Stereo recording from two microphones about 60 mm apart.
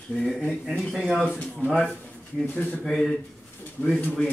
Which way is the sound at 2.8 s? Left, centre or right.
Centre.